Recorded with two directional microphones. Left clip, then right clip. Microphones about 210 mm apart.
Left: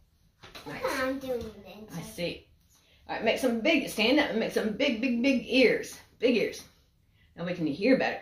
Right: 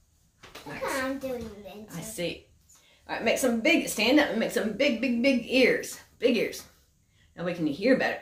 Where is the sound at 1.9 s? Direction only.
15° right (ahead or behind).